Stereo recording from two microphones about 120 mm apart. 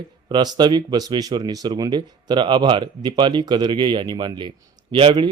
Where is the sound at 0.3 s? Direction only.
35° right (ahead or behind).